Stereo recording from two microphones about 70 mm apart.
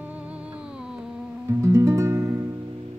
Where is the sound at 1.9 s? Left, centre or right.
Right.